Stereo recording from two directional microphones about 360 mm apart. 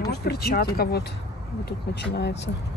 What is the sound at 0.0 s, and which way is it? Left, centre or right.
Speech, left.